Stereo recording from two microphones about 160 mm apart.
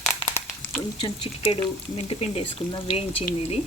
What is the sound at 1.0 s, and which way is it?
Speech, 30° left (ahead or behind).